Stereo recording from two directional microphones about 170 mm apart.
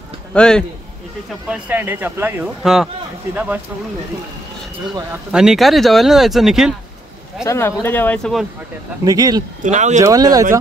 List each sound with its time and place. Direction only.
0.3 s speech: 5° left (ahead or behind)
1.5 s speech: 10° right (ahead or behind)
5.3 s speech: 5° right (ahead or behind)
7.4 s speech: 15° left (ahead or behind)
9.0 s speech: 20° right (ahead or behind)
9.6 s speech: 45° right (ahead or behind)
10.0 s speech: 20° right (ahead or behind)